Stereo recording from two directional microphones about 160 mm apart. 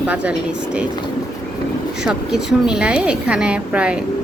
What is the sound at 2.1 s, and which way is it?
Speech, 5° right (ahead or behind).